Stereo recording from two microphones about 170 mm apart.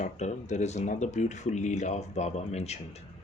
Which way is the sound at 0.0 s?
45° left (ahead or behind).